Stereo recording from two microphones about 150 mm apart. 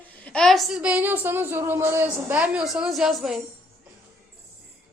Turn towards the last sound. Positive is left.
turn(degrees=0)  # may be behind; listen again after turning